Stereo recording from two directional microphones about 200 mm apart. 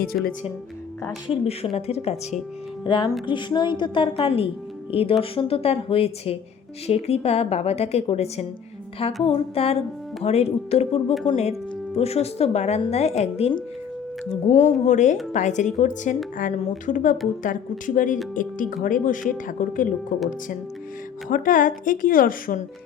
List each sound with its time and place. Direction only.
0.1 s speech: 55° left (ahead or behind)
1.5 s a woman's voice: 30° left (ahead or behind)
21.2 s a woman's voice: 40° left (ahead or behind)